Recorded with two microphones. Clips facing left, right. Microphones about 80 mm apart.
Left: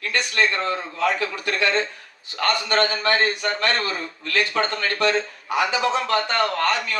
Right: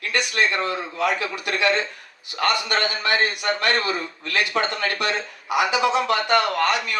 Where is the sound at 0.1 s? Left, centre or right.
Centre.